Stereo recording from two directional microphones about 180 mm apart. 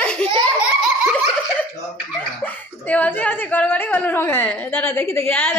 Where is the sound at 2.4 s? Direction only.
10° left (ahead or behind).